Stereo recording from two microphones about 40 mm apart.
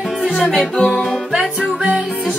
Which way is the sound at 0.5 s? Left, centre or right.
Left.